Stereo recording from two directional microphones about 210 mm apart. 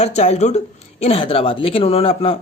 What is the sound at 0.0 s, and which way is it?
A man's voice, 30° left (ahead or behind).